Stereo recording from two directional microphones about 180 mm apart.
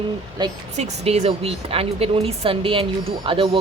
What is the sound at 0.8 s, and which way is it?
Speech, 35° right (ahead or behind).